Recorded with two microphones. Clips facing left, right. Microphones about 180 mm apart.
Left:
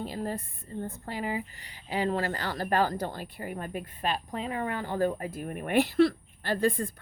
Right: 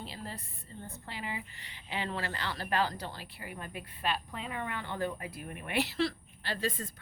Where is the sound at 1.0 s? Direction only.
45° left (ahead or behind).